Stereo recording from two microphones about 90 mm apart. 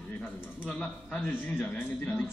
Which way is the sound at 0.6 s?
10° left (ahead or behind).